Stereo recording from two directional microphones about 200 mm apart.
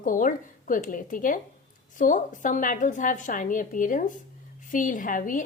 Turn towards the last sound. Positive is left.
turn(degrees=40)  # may be behind; listen again after turning